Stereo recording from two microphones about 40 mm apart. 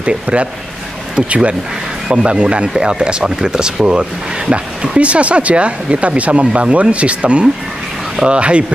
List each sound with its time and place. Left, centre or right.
0.0 s speech: right